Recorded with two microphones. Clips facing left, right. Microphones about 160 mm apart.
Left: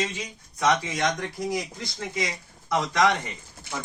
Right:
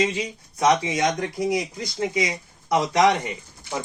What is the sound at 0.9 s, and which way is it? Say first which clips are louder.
Speech: right 4 dB; 20° right (ahead or behind).